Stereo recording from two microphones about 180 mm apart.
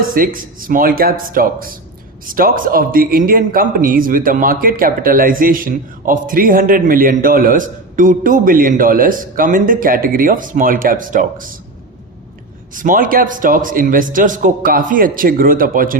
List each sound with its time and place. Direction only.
0.3 s a man's voice: 50° right (ahead or behind)
12.7 s a man's voice: 50° right (ahead or behind)